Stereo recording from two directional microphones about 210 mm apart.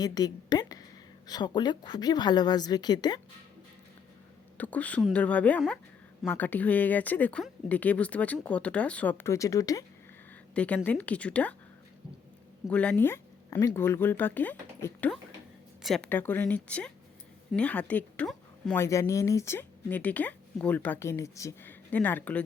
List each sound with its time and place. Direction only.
0.0 s a sound: 20° left (ahead or behind)
1.3 s a woman's voice: 20° left (ahead or behind)
4.5 s speech: 5° left (ahead or behind)
12.6 s speech: 5° left (ahead or behind)
18.8 s speech: 15° left (ahead or behind)